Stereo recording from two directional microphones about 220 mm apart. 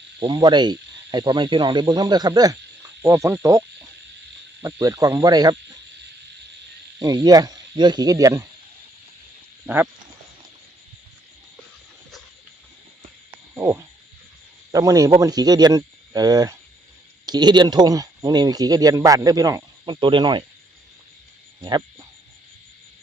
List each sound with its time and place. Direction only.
0.2 s speech: 20° right (ahead or behind)
4.6 s speech: 15° right (ahead or behind)
7.0 s speech: 15° right (ahead or behind)
9.6 s speech: 5° right (ahead or behind)
13.5 s frog: 10° right (ahead or behind)
14.7 s speech: 15° right (ahead or behind)
21.6 s speech: 20° right (ahead or behind)